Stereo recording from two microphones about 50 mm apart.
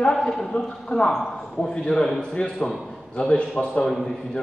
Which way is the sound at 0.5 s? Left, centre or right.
Centre.